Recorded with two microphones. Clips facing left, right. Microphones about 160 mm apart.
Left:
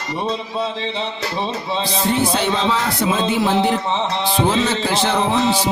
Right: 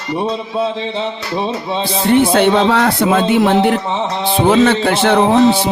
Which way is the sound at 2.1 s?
60° right (ahead or behind).